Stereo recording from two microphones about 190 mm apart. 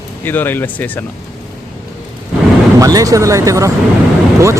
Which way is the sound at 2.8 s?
20° right (ahead or behind).